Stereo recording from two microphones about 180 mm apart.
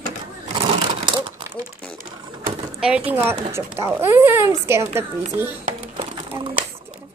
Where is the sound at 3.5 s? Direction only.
15° right (ahead or behind).